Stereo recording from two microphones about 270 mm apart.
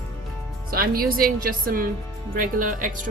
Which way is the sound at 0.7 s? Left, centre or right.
Right.